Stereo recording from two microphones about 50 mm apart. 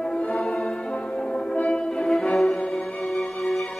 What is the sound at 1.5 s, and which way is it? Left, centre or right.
Music, centre.